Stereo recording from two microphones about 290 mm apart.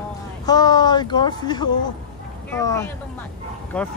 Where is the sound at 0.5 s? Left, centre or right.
Centre.